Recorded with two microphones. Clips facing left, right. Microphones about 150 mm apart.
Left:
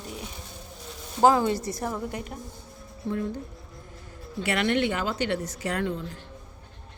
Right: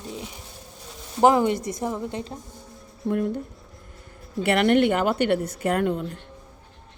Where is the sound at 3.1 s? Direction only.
60° right (ahead or behind).